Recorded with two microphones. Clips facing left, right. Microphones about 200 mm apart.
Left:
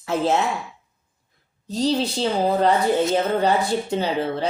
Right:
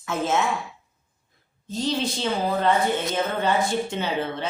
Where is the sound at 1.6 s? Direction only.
40° left (ahead or behind).